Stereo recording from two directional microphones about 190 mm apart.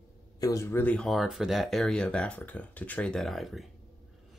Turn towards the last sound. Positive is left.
turn(degrees=0)  # may be behind; listen again after turning